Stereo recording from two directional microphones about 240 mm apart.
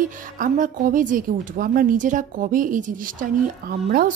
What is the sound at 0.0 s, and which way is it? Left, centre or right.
A woman's voice, right.